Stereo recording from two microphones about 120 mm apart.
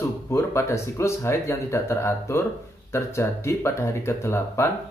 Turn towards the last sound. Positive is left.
turn(degrees=20)  # may be behind; listen again after turning